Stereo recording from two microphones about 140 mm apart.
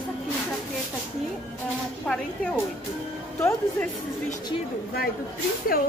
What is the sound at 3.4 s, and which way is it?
Speech, 20° left (ahead or behind).